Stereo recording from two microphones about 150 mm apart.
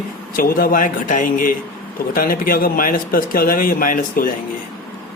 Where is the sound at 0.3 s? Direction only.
75° left (ahead or behind).